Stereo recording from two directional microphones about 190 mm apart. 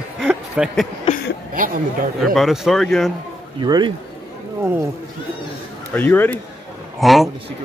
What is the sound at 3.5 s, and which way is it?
Speech, 25° right (ahead or behind).